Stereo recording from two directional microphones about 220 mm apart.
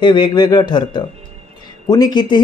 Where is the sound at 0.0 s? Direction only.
20° left (ahead or behind).